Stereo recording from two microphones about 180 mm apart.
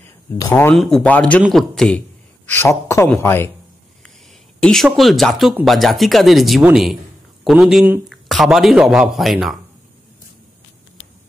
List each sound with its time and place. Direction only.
0.4 s speech: 15° left (ahead or behind)
0.7 s a man's voice: 5° left (ahead or behind)
4.6 s speech: centre (ahead or behind)